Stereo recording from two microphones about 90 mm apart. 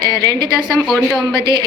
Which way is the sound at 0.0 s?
45° right (ahead or behind).